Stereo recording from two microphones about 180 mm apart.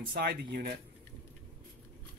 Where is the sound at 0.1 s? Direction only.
60° right (ahead or behind).